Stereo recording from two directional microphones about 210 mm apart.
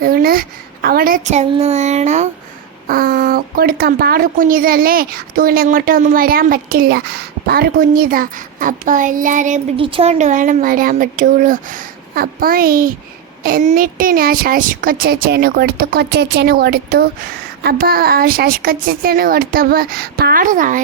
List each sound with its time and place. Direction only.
0.0 s a woman's voice: 45° right (ahead or behind)